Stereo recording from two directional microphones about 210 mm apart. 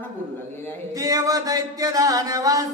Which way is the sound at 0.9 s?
15° right (ahead or behind).